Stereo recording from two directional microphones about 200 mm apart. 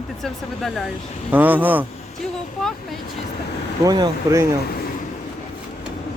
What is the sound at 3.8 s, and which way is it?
Speech, 20° right (ahead or behind).